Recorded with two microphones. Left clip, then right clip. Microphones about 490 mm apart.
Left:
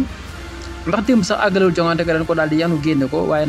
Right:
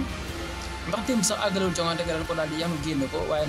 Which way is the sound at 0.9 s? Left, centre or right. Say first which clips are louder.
Left 10 dB; right.